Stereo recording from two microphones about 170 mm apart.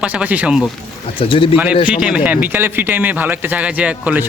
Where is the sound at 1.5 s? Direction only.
10° right (ahead or behind).